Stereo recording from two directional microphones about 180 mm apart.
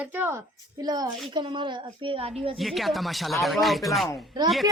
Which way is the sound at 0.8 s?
20° right (ahead or behind).